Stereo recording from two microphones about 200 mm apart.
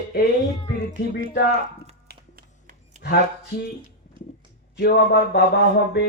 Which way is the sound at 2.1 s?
45° right (ahead or behind).